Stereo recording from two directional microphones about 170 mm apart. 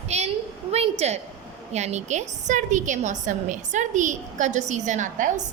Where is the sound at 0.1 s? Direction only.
40° right (ahead or behind).